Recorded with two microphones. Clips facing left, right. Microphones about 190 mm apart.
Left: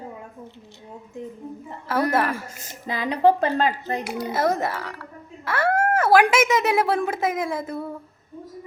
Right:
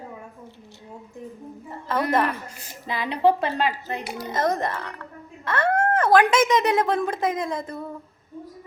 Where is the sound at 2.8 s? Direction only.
45° left (ahead or behind).